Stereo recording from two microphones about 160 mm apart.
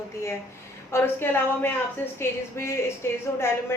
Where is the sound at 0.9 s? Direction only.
15° left (ahead or behind).